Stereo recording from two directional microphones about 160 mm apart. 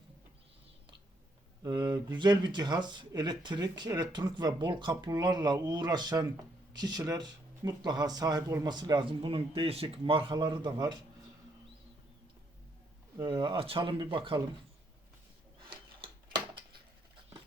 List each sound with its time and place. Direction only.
1.6 s speech: 25° right (ahead or behind)
13.1 s speech: 25° right (ahead or behind)